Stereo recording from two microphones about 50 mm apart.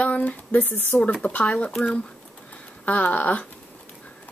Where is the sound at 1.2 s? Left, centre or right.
Left.